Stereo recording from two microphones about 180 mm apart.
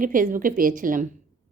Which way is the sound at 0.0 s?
50° right (ahead or behind).